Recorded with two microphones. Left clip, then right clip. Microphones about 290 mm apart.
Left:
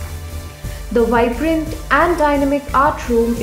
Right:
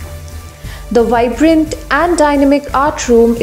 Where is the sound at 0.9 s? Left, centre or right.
Right.